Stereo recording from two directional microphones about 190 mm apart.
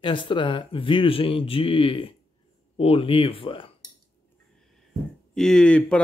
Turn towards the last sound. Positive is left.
turn(degrees=5)  # may be behind; listen again after turning